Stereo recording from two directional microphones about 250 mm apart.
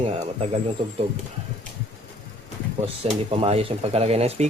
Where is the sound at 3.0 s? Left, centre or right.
Right.